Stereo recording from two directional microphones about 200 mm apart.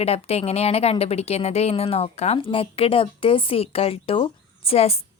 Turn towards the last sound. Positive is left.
turn(degrees=30)  # may be behind; listen again after turning